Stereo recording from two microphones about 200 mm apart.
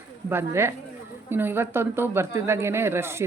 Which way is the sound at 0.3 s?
10° right (ahead or behind).